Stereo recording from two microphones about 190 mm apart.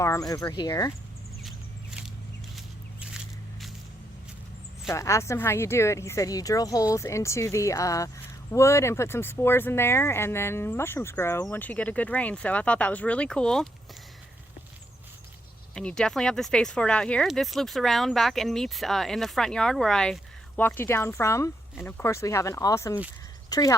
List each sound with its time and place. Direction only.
0.0 s speech: 15° left (ahead or behind)
1.5 s a sound: 5° right (ahead or behind)
4.9 s speech: 15° left (ahead or behind)
15.7 s speech: 5° left (ahead or behind)